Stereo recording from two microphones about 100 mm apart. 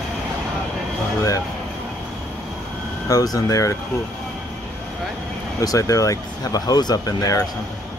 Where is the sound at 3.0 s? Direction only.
40° left (ahead or behind).